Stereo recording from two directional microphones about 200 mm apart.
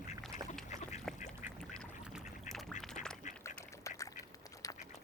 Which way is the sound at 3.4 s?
15° left (ahead or behind).